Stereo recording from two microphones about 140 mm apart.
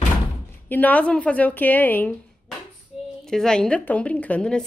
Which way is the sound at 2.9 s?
Centre (ahead or behind).